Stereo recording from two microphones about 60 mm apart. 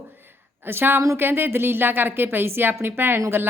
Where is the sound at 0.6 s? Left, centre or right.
Right.